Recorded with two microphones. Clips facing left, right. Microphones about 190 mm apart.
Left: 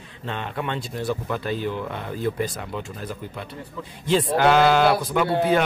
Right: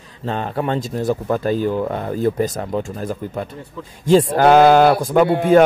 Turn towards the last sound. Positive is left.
turn(degrees=-45)  # may be behind; listen again after turning